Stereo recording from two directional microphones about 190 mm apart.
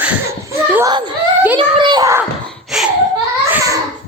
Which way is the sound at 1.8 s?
20° right (ahead or behind).